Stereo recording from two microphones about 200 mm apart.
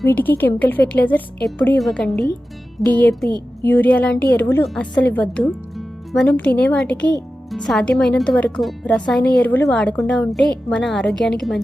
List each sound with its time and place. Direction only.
0.0 s a woman's voice: 10° left (ahead or behind)